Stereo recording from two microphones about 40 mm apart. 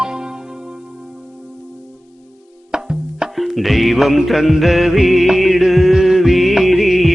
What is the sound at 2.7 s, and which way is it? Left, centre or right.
Music, centre.